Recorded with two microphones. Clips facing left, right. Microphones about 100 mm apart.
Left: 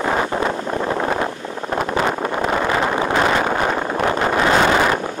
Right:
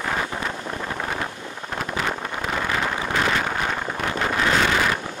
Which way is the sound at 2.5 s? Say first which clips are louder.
Left 5 dB; 35° left (ahead or behind).